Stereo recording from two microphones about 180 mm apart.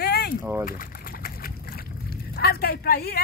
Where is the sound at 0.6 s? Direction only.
55° left (ahead or behind).